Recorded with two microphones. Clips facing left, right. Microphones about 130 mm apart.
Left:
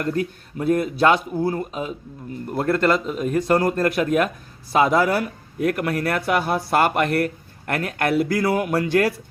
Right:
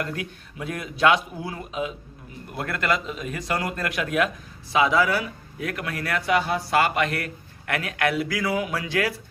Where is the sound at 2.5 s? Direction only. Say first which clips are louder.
Left 7 dB; 35° left (ahead or behind).